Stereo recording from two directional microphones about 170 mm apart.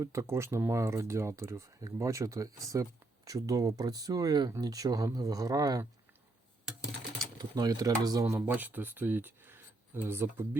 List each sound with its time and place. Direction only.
0.0 s speech: 15° right (ahead or behind)
7.3 s speech: 25° right (ahead or behind)